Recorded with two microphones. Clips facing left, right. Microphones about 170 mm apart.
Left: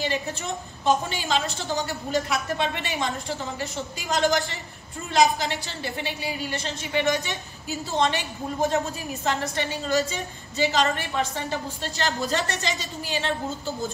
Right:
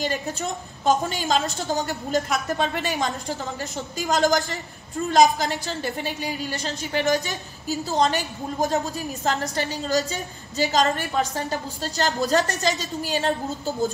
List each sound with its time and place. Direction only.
0.0 s a woman's voice: 40° right (ahead or behind)